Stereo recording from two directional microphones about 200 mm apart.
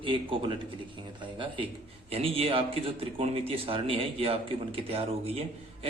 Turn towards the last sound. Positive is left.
turn(degrees=-30)  # may be behind; listen again after turning